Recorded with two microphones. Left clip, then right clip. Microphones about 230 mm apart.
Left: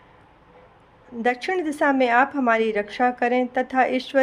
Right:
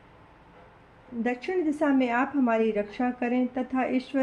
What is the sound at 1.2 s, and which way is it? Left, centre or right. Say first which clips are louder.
A woman's voice: left 5 dB; left.